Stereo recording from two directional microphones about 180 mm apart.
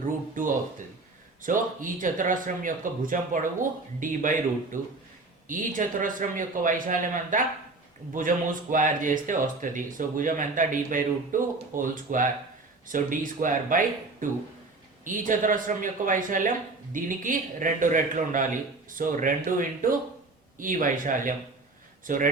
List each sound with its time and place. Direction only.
0.4 s speech: 50° right (ahead or behind)